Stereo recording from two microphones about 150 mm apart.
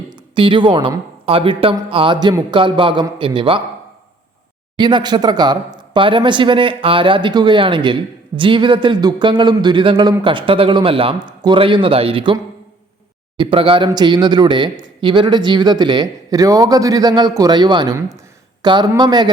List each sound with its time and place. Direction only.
0.1 s speech: 35° right (ahead or behind)
4.8 s speech: 30° right (ahead or behind)